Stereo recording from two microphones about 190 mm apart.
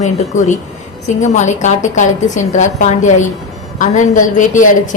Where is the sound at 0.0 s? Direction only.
40° left (ahead or behind).